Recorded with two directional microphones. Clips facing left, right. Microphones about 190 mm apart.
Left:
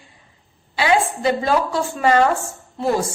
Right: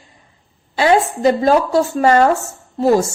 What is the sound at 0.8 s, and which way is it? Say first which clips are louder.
A woman's voice: right 4 dB; 40° right (ahead or behind).